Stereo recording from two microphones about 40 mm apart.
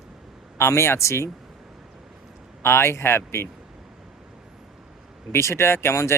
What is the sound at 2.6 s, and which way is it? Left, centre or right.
Speech, left.